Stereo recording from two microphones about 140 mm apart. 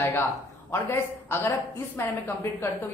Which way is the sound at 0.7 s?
15° left (ahead or behind).